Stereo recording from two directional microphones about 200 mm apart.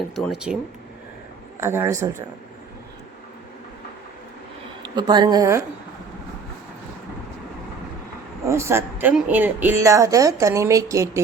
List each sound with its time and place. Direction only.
0.2 s speech: centre (ahead or behind)
1.6 s speech: 10° right (ahead or behind)
4.8 s a woman's voice: 20° right (ahead or behind)
8.4 s speech: 15° right (ahead or behind)